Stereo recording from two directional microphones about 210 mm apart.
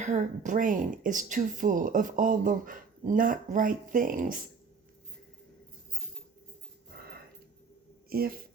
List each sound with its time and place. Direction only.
0.0 s speech: 35° right (ahead or behind)
8.1 s speech: 45° right (ahead or behind)